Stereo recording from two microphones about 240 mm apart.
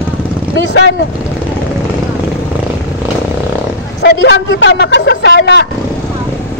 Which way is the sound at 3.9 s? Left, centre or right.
Left.